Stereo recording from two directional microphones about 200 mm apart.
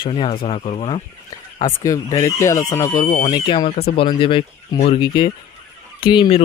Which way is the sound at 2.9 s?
40° left (ahead or behind).